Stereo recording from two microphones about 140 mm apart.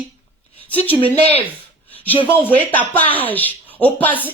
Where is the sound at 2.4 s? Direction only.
10° left (ahead or behind).